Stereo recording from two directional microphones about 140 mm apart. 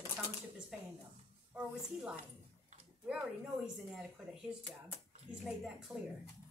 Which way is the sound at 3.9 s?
5° right (ahead or behind).